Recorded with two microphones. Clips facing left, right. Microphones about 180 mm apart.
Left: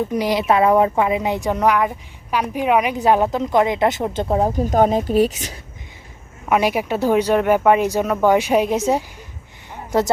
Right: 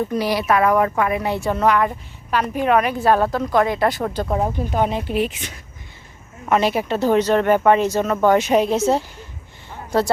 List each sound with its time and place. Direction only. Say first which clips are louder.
0.1 s a woman's voice: left 1 dB; 20° left (ahead or behind); by 5.5 s 40° left (ahead or behind)
6.5 s speech: even; 10° left (ahead or behind)